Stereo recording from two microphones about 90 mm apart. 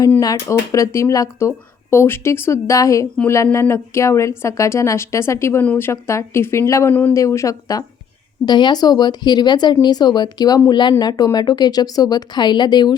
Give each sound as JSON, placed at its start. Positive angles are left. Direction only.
{"t": 0.2, "sound": "speech", "side_deg": 40}
{"t": 8.4, "sound": "speech", "side_deg": 55}